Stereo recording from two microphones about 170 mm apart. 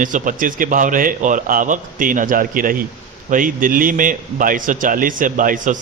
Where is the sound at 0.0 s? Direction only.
50° right (ahead or behind).